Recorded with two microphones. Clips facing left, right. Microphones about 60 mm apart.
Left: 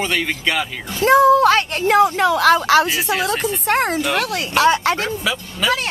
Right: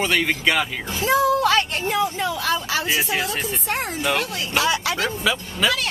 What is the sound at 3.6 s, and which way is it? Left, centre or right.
Speech, left.